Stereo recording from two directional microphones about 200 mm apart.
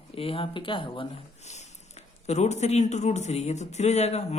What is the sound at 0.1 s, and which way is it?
Speech, 30° left (ahead or behind).